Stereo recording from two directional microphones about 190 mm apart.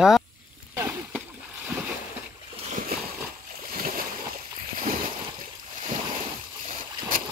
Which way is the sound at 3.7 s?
50° right (ahead or behind).